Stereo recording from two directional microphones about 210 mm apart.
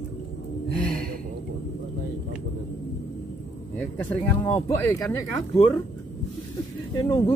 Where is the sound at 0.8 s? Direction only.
5° left (ahead or behind).